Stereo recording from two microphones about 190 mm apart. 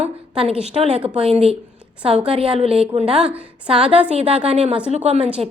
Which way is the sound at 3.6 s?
30° right (ahead or behind).